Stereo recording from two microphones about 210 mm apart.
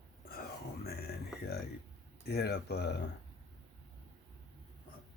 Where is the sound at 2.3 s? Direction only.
50° left (ahead or behind).